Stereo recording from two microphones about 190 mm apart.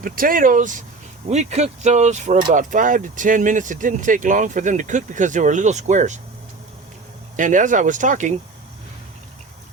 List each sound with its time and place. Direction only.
0.0 s speech: 50° right (ahead or behind)
7.3 s speech: 40° right (ahead or behind)